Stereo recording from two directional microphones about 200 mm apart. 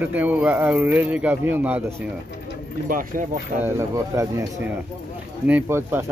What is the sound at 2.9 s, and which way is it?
Speech, 40° right (ahead or behind).